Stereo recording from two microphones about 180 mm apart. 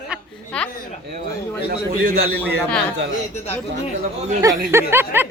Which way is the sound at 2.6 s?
5° left (ahead or behind).